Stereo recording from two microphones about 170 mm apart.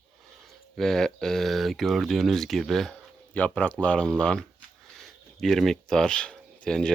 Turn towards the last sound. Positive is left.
turn(degrees=5)  # may be behind; listen again after turning